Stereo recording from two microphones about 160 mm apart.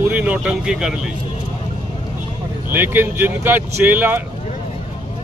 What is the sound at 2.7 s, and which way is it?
Speech, 15° right (ahead or behind).